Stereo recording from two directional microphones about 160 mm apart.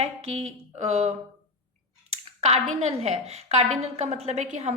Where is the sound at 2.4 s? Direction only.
45° right (ahead or behind).